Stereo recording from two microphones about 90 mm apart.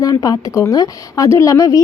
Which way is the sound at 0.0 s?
45° left (ahead or behind).